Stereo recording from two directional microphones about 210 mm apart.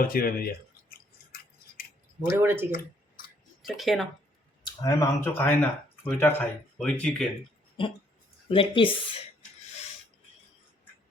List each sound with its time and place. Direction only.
0.0 s scissors: 45° left (ahead or behind)
2.3 s speech: 10° right (ahead or behind)
4.8 s speech: 15° left (ahead or behind)
7.8 s speech: 25° left (ahead or behind)